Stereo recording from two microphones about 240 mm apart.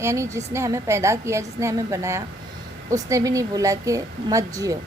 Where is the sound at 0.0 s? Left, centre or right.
Centre.